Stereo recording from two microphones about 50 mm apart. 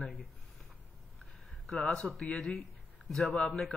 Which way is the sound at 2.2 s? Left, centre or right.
Centre.